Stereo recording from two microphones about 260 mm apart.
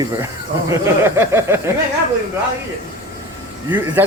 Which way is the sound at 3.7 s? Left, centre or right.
Centre.